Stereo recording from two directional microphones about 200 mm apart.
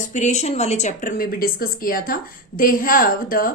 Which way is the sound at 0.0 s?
35° left (ahead or behind).